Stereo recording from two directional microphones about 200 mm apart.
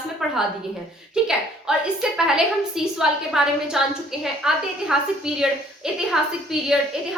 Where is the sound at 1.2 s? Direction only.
5° right (ahead or behind).